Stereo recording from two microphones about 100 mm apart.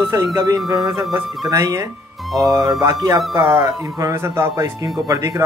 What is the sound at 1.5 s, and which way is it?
A man's voice, 35° right (ahead or behind).